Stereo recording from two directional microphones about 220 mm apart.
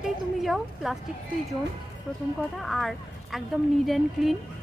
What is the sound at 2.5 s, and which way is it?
Speech, centre (ahead or behind).